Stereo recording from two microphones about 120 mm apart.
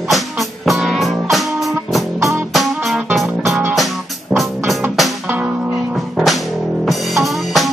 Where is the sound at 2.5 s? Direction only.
Centre (ahead or behind).